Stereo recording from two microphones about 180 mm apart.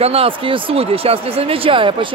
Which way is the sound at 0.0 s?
30° right (ahead or behind).